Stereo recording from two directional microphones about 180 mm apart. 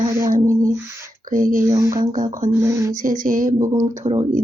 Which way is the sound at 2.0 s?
45° right (ahead or behind).